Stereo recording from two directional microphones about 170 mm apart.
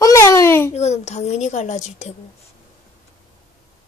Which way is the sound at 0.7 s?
40° left (ahead or behind).